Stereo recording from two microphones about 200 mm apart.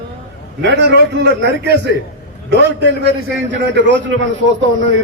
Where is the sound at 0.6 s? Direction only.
60° right (ahead or behind).